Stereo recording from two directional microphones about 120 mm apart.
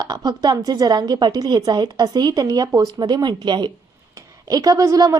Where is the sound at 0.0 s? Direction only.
30° right (ahead or behind).